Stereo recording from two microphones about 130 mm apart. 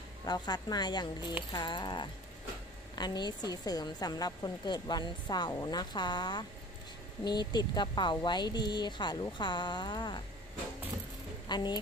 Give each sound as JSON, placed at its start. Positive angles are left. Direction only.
{"t": 0.2, "sound": "a woman's voice", "side_deg": 30}
{"t": 11.4, "sound": "speech", "side_deg": 35}